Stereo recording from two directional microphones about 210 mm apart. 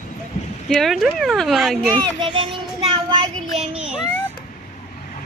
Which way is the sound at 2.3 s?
25° right (ahead or behind).